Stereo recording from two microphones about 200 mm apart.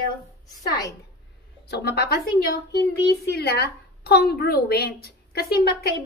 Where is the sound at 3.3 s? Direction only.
50° left (ahead or behind).